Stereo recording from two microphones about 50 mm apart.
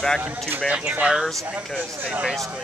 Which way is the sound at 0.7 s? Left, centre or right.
Right.